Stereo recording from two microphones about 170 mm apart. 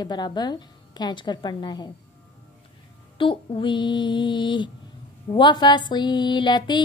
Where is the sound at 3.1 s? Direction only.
30° left (ahead or behind).